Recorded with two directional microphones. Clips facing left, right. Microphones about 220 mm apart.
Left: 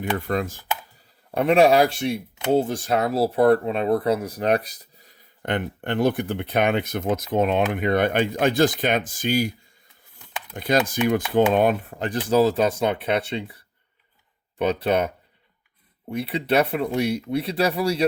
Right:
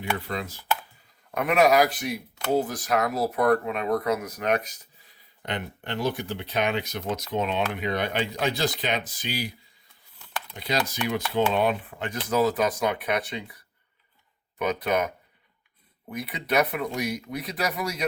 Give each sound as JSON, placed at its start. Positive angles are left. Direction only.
{"t": 0.0, "sound": "speech", "side_deg": 50}
{"t": 1.3, "sound": "speech", "side_deg": 30}
{"t": 14.6, "sound": "speech", "side_deg": 30}